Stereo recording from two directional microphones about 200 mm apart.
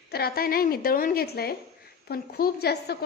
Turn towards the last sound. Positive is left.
turn(degrees=50)  # may be behind; listen again after turning